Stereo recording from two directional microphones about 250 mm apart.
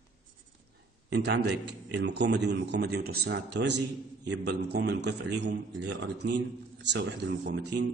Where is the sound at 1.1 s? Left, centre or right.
Right.